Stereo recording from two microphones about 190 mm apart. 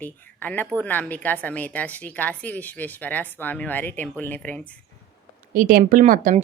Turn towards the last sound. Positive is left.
turn(degrees=-45)  # may be behind; listen again after turning